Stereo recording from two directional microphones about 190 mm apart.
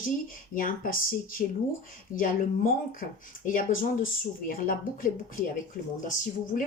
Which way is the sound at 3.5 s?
45° left (ahead or behind).